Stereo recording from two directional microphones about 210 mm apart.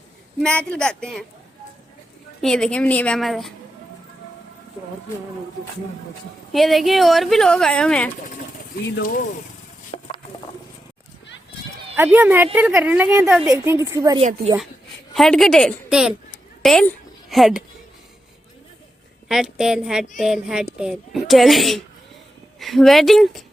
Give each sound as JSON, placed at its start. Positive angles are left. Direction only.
{"t": 0.4, "sound": "speech", "side_deg": 5}
{"t": 2.4, "sound": "speech", "side_deg": 5}
{"t": 6.5, "sound": "speech", "side_deg": 0}
{"t": 8.7, "sound": "speech", "side_deg": 40}
{"t": 11.9, "sound": "speech", "side_deg": -10}
{"t": 13.5, "sound": "speech", "side_deg": -15}
{"t": 14.2, "sound": "speech", "side_deg": -30}
{"t": 15.1, "sound": "speech", "side_deg": 0}
{"t": 16.6, "sound": "a sound", "side_deg": 0}
{"t": 19.3, "sound": "speech", "side_deg": 0}